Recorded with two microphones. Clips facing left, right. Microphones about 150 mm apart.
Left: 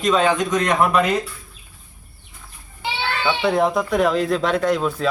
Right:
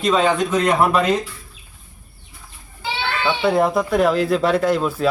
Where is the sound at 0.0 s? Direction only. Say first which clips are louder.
Right 1 dB; centre (ahead or behind).